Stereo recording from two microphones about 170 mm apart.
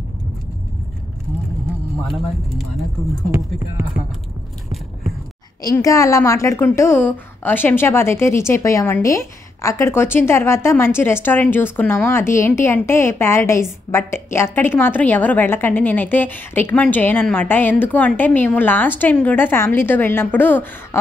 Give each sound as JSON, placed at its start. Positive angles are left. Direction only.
{"t": 2.0, "sound": "speech", "side_deg": 0}
{"t": 3.3, "sound": "speech", "side_deg": -10}
{"t": 5.6, "sound": "a woman's voice", "side_deg": 20}